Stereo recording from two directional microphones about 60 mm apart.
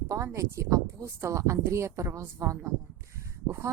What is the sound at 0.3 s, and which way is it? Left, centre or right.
Speech, right.